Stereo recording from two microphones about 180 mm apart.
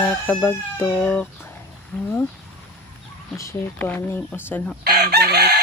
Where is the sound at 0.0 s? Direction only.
10° left (ahead or behind).